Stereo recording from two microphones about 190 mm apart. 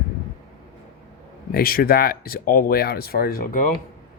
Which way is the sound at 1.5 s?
50° left (ahead or behind).